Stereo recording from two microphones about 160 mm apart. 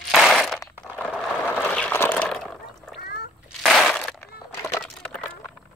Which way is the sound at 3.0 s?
75° left (ahead or behind).